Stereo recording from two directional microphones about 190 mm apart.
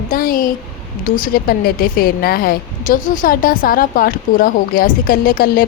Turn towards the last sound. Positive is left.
turn(degrees=50)  # may be behind; listen again after turning